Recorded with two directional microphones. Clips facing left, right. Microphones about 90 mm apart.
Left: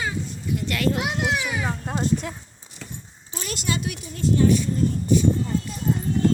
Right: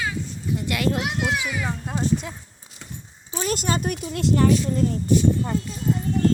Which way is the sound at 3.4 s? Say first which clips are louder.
Right 4 dB; 45° right (ahead or behind).